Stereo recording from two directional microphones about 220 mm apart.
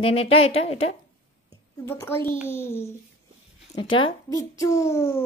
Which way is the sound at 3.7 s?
20° left (ahead or behind).